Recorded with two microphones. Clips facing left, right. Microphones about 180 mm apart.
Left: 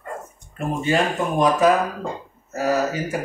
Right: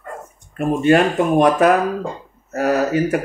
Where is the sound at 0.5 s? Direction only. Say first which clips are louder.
Right 7 dB; 60° right (ahead or behind).